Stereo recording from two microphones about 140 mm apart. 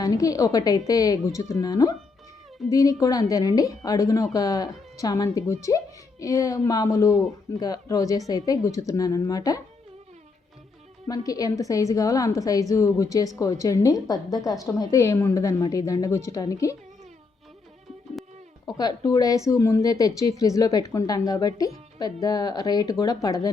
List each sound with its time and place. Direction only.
0.0 s speech: 25° left (ahead or behind)
11.1 s speech: 25° left (ahead or behind)
18.6 s speech: 30° left (ahead or behind)